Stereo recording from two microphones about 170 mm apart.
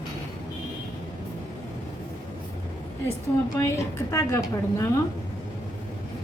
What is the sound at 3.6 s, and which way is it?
A woman's voice, 20° left (ahead or behind).